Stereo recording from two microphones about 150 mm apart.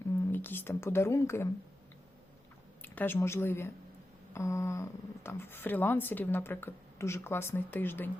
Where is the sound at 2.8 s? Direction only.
15° left (ahead or behind).